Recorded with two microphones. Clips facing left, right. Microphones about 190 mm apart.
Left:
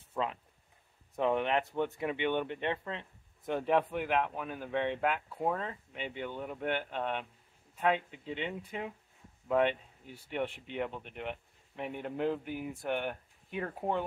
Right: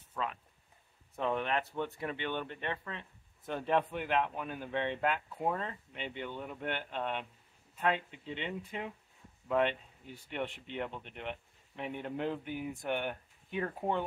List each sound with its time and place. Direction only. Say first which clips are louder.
0.1 s speech: left 3 dB; 25° left (ahead or behind); by 14.0 s 5° left (ahead or behind)